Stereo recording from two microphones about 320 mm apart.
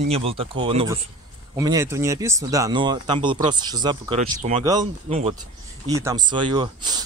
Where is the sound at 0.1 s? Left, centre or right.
Centre.